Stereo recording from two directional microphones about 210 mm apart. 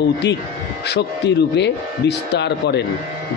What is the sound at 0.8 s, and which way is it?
Speech, 55° left (ahead or behind).